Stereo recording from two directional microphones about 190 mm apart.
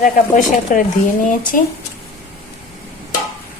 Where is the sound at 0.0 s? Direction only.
45° left (ahead or behind).